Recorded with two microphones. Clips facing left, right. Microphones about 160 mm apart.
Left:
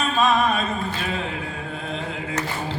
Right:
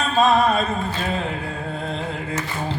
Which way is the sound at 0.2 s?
35° right (ahead or behind).